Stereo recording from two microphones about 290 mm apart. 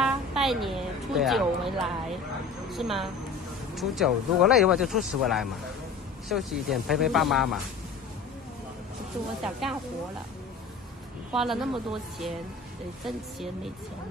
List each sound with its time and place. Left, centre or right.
0.0 s speech: centre
9.4 s speech: centre
11.3 s speech: centre